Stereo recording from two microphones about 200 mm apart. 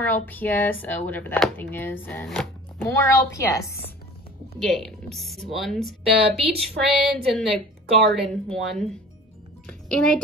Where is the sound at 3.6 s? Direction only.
50° left (ahead or behind).